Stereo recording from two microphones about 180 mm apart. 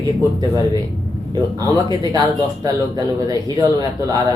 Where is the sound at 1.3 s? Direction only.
20° right (ahead or behind).